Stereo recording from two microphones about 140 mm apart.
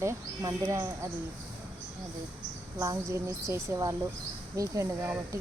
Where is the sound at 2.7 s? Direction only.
20° right (ahead or behind).